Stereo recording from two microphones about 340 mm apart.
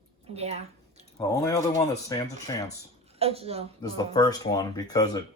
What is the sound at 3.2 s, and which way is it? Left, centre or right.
Speech, centre.